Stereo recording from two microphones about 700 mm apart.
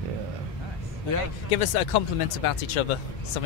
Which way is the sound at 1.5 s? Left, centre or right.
Left.